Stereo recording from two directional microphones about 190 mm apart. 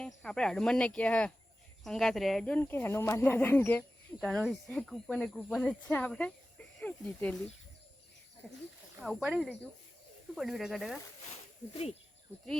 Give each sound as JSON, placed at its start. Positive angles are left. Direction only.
{"t": 0.0, "sound": "speech", "side_deg": 5}
{"t": 9.0, "sound": "speech", "side_deg": 0}
{"t": 11.7, "sound": "speech", "side_deg": 35}